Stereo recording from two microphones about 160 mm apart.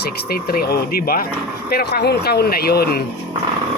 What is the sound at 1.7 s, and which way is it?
Speech, 90° left.